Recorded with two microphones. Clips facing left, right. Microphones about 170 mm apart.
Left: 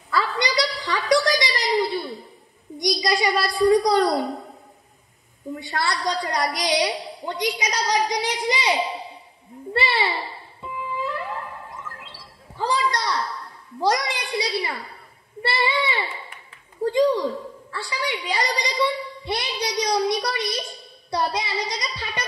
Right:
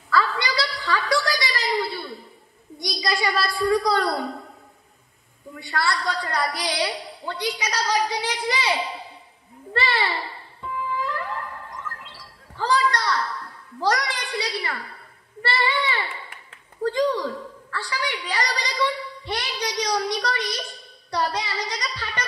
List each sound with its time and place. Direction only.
0.1 s a sound: 20° left (ahead or behind)
5.5 s a woman's voice: 20° left (ahead or behind)
9.7 s music: 10° left (ahead or behind)
15.4 s a woman's voice: 10° left (ahead or behind)